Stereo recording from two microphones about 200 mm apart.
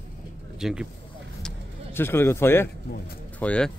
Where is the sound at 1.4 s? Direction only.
10° left (ahead or behind).